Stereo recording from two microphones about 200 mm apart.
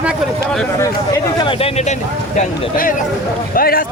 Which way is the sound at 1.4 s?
25° left (ahead or behind).